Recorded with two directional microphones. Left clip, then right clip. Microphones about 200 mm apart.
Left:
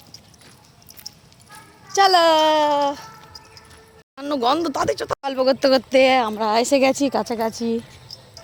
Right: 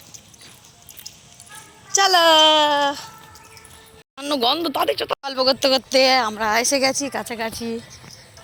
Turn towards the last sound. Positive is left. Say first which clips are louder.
# left 3 dB
turn(degrees=20)  # may be behind; listen again after turning